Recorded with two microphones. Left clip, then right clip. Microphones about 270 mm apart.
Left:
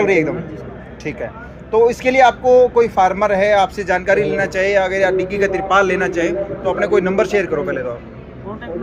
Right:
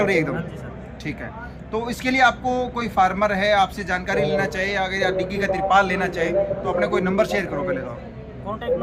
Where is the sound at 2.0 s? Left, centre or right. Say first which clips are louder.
Left 2 dB; centre.